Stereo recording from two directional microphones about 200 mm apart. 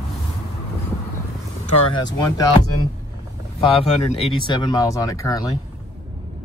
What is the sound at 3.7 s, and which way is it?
Speech, 30° left (ahead or behind).